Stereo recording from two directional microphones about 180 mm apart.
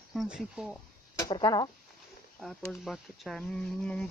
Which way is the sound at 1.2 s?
20° left (ahead or behind).